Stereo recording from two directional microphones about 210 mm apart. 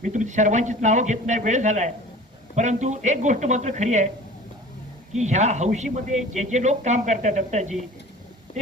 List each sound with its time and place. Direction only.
0.0 s a man's voice: 35° right (ahead or behind)
5.1 s a man's voice: 35° right (ahead or behind)